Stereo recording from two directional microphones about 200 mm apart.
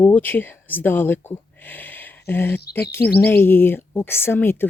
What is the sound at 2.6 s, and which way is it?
Speech, 55° left (ahead or behind).